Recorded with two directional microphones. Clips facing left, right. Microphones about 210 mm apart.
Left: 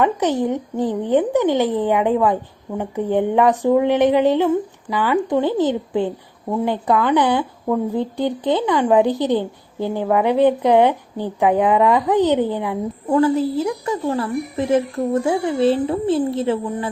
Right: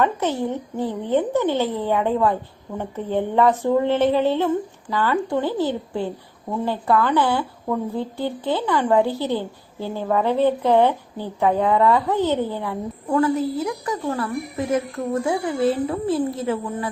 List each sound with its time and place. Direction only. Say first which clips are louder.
0.0 s a woman's voice: left 3 dB; 15° left (ahead or behind)